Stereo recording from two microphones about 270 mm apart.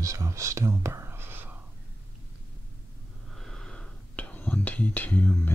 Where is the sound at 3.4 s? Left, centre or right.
Centre.